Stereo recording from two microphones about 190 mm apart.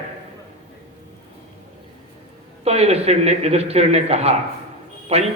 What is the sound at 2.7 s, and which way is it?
A man's voice, 35° right (ahead or behind).